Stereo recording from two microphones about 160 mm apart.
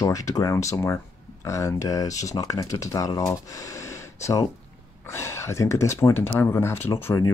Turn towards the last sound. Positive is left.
turn(degrees=20)  # may be behind; listen again after turning